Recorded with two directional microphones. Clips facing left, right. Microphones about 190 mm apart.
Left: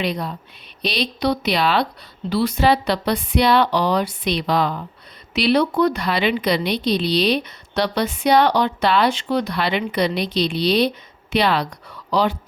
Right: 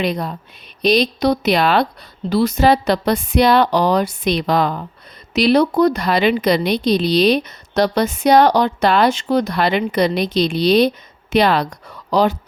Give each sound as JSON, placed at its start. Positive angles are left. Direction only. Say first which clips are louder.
{"t": 0.0, "sound": "a woman's voice", "louder": "right 3 dB", "side_deg": -45}